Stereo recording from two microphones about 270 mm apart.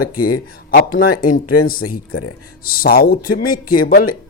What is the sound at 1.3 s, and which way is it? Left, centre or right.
Speech, left.